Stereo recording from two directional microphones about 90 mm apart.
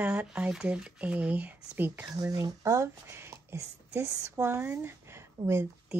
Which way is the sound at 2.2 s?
40° right (ahead or behind).